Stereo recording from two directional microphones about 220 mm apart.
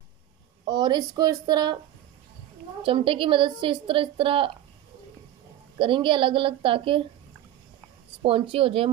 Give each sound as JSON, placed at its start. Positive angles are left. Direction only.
{"t": 0.7, "sound": "a woman's voice", "side_deg": -20}
{"t": 2.8, "sound": "a woman's voice", "side_deg": -25}
{"t": 5.8, "sound": "a woman's voice", "side_deg": -25}
{"t": 8.2, "sound": "a woman's voice", "side_deg": -25}